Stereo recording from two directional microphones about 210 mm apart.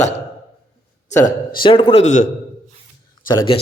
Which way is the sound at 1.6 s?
25° left (ahead or behind).